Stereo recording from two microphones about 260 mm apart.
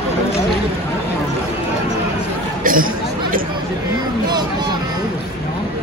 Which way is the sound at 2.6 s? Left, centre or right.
Right.